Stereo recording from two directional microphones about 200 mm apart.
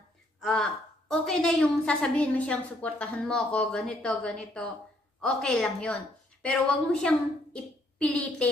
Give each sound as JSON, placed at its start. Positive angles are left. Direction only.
{"t": 0.4, "sound": "a woman's voice", "side_deg": 5}